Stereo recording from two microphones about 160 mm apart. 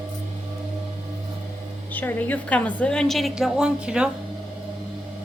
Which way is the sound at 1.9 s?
10° left (ahead or behind).